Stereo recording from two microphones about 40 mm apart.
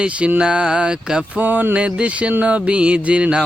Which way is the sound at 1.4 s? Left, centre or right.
Right.